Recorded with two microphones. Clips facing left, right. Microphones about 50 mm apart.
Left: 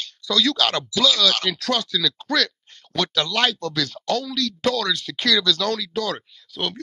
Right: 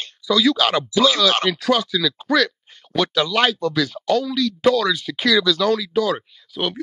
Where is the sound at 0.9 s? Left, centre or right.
Right.